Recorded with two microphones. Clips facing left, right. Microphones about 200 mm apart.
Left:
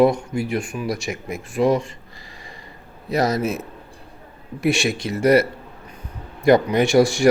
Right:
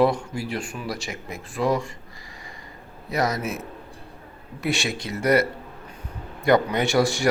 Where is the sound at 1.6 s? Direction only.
20° left (ahead or behind).